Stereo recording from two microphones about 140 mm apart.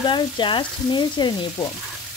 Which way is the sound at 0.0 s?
35° left (ahead or behind).